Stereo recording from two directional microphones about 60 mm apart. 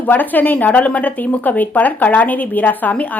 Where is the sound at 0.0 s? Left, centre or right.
Left.